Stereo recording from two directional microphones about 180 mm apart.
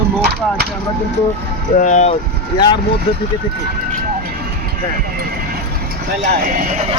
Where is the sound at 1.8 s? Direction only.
40° left (ahead or behind).